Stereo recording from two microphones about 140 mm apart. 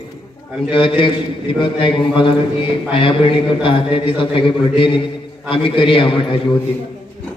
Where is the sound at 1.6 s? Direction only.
35° left (ahead or behind).